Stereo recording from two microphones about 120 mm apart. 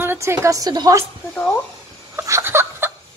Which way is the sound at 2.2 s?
25° right (ahead or behind).